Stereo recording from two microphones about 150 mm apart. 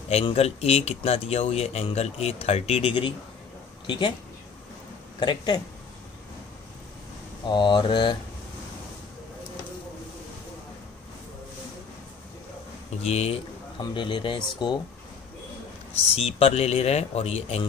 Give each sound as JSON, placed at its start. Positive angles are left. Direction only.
{"t": 0.1, "sound": "speech", "side_deg": 45}
{"t": 5.2, "sound": "speech", "side_deg": 30}
{"t": 7.4, "sound": "speech", "side_deg": 30}
{"t": 13.0, "sound": "speech", "side_deg": 45}
{"t": 13.9, "sound": "speech", "side_deg": 35}
{"t": 16.2, "sound": "speech", "side_deg": 40}